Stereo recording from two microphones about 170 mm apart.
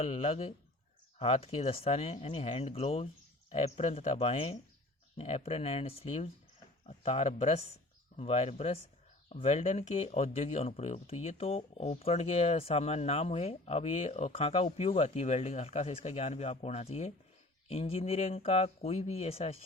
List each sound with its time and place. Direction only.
0.0 s speech: 35° left (ahead or behind)